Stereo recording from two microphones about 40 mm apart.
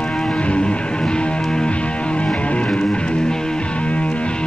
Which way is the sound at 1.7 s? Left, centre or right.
Left.